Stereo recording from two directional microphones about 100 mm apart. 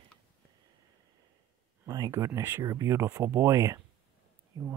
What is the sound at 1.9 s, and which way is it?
Speech, 35° right (ahead or behind).